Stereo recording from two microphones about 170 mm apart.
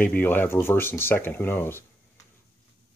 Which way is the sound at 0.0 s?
10° left (ahead or behind).